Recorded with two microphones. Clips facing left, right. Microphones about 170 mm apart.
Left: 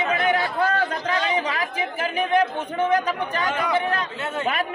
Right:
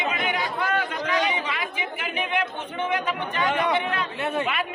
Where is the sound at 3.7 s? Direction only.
40° left (ahead or behind).